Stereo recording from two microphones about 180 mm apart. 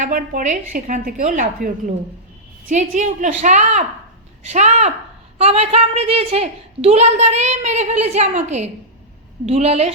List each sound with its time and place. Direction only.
0.0 s a woman's voice: 50° right (ahead or behind)